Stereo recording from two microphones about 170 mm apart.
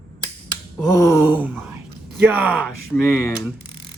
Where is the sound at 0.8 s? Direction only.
20° left (ahead or behind).